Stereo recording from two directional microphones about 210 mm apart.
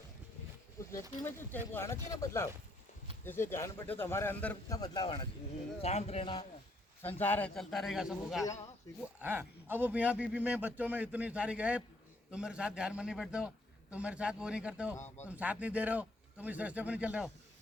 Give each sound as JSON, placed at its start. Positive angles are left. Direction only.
{"t": 1.2, "sound": "speech", "side_deg": 10}
{"t": 4.8, "sound": "speech", "side_deg": 20}
{"t": 7.2, "sound": "a man's voice", "side_deg": 10}
{"t": 14.9, "sound": "speech", "side_deg": 10}
{"t": 15.3, "sound": "a man's voice", "side_deg": -5}